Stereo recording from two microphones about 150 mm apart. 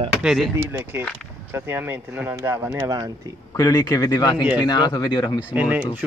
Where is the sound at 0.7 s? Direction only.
10° right (ahead or behind).